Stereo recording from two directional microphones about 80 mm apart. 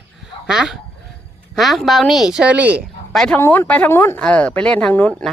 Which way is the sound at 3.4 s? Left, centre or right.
Left.